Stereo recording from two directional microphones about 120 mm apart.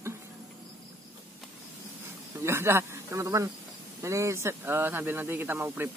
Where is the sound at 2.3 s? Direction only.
20° right (ahead or behind).